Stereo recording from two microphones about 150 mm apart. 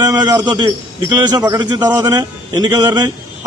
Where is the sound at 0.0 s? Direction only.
25° right (ahead or behind).